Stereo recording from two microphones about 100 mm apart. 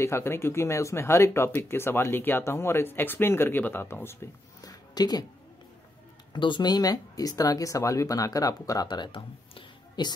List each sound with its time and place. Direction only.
0.0 s speech: 25° left (ahead or behind)
4.6 s a sound: 40° left (ahead or behind)
6.3 s speech: 50° left (ahead or behind)